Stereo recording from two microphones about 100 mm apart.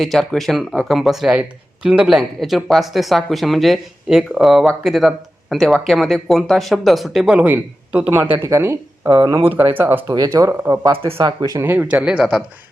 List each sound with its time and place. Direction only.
0.0 s speech: 5° left (ahead or behind)
7.3 s speech: 15° right (ahead or behind)
9.0 s speech: 45° right (ahead or behind)
9.4 s speech: 20° right (ahead or behind)
10.1 s speech: 35° right (ahead or behind)
10.9 s speech: 65° right (ahead or behind); by 11.5 s 50° right (ahead or behind)
11.6 s speech: 15° right (ahead or behind)